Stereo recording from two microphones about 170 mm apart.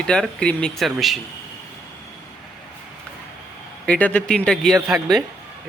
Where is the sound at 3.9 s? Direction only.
10° left (ahead or behind).